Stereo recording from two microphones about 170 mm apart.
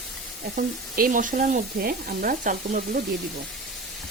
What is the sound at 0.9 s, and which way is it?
Sizzle, 55° right (ahead or behind).